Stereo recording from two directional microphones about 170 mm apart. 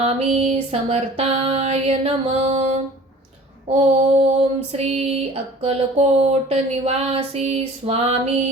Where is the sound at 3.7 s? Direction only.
35° right (ahead or behind).